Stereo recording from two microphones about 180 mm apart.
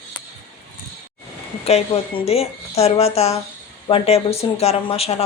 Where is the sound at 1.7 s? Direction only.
35° left (ahead or behind).